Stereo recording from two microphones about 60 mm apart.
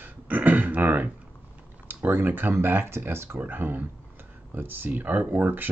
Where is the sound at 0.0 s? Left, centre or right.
Right.